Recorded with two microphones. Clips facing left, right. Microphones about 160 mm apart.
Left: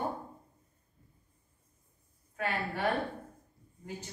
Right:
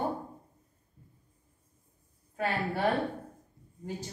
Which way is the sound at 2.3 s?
35° right (ahead or behind).